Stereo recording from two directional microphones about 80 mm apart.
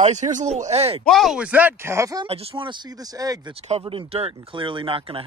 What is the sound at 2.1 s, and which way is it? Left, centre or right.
Speech, right.